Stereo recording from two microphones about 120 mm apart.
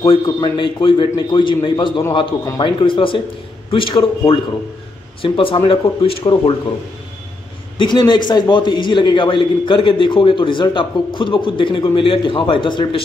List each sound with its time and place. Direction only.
0.0 s a man's voice: 45° left (ahead or behind)
7.7 s a man's voice: 40° left (ahead or behind)